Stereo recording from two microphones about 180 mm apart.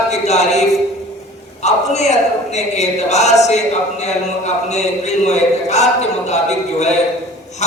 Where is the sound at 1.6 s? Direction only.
40° left (ahead or behind).